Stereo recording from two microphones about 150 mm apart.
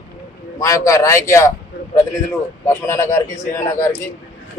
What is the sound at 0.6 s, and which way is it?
Speech, 20° left (ahead or behind).